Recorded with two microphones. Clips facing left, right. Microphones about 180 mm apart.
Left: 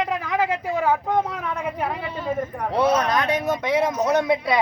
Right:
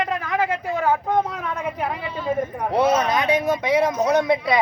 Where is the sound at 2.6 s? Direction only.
10° right (ahead or behind).